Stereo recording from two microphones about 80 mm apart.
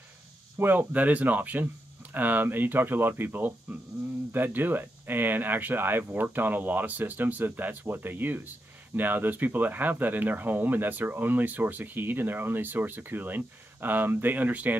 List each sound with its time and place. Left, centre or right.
0.6 s speech: right